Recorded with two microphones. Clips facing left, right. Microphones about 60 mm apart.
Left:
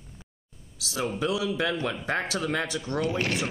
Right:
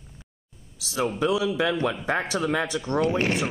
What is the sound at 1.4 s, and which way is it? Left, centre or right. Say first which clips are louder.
A man's voice: right 4 dB; centre.